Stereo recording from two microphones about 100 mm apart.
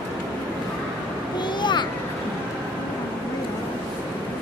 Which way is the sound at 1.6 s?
50° left (ahead or behind).